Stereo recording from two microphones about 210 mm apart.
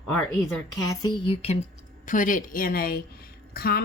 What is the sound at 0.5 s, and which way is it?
A woman's voice, 15° left (ahead or behind).